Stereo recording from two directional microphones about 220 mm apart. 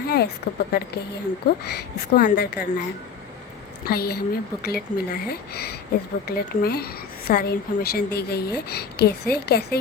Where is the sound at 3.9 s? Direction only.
45° left (ahead or behind).